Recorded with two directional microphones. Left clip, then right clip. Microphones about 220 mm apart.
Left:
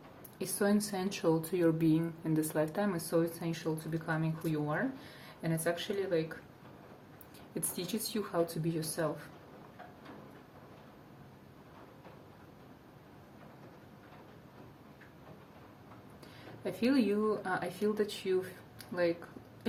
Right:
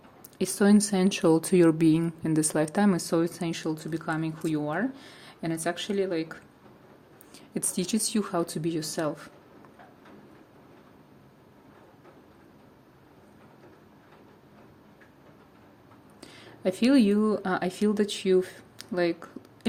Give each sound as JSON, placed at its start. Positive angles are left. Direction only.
{"t": 0.3, "sound": "speech", "side_deg": -45}
{"t": 7.5, "sound": "speech", "side_deg": -45}
{"t": 16.2, "sound": "speech", "side_deg": -50}